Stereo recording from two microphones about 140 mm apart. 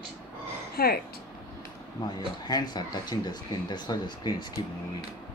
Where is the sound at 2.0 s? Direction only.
30° left (ahead or behind).